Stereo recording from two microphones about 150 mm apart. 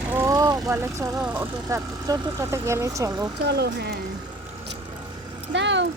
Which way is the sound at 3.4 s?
90° right.